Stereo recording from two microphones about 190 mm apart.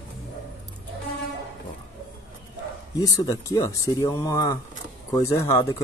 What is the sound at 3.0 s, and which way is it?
Speech, 20° left (ahead or behind).